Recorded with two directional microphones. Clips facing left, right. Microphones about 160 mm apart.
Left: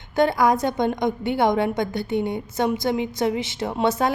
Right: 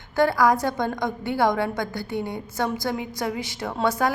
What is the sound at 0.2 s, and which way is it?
A woman's voice, 20° left (ahead or behind).